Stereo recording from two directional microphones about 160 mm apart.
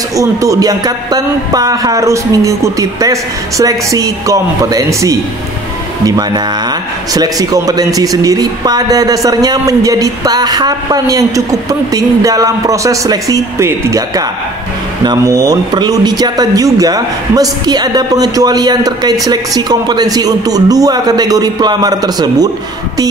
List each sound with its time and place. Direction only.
0.1 s speech: 20° right (ahead or behind)